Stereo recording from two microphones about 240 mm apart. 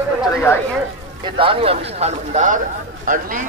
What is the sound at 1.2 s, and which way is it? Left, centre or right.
Speech, right.